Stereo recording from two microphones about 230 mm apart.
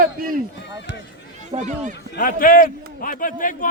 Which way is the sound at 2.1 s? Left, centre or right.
Left.